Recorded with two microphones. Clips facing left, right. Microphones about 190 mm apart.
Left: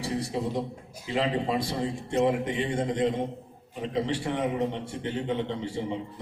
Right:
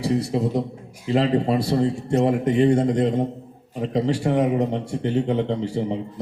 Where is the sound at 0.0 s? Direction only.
40° right (ahead or behind).